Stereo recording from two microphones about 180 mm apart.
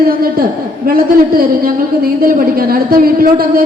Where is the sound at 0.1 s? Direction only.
55° right (ahead or behind).